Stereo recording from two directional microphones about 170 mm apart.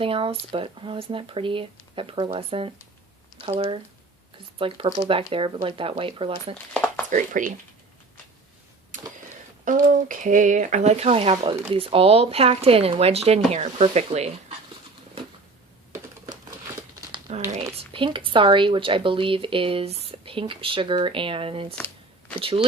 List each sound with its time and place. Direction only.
0.0 s speech: 30° right (ahead or behind)
6.7 s a sound: 10° left (ahead or behind)
7.1 s speech: 50° right (ahead or behind)
9.6 s speech: 50° right (ahead or behind)
16.9 s crumpling: 20° right (ahead or behind)
17.2 s speech: 40° right (ahead or behind)
17.7 s speech: 30° right (ahead or behind)